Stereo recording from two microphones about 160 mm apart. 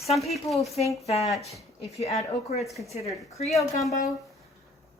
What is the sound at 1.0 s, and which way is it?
Speech, 40° left (ahead or behind).